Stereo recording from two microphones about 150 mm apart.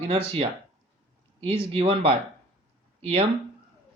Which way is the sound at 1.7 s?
40° right (ahead or behind).